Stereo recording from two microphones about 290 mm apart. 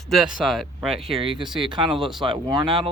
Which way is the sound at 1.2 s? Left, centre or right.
Centre.